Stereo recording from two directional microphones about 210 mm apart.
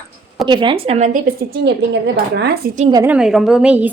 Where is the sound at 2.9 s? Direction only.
10° right (ahead or behind).